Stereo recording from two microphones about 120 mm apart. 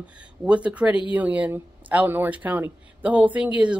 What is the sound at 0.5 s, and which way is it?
Speech, 10° right (ahead or behind).